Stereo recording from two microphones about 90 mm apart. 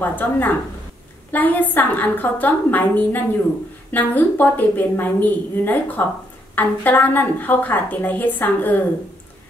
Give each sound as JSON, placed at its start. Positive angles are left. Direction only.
{"t": 0.0, "sound": "a woman's voice", "side_deg": 20}